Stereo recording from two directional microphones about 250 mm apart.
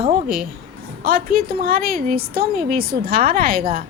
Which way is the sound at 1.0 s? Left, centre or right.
Right.